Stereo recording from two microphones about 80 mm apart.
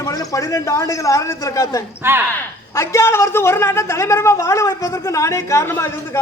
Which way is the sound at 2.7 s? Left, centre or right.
Left.